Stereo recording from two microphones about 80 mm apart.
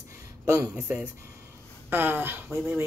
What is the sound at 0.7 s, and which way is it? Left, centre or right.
A woman's voice, centre.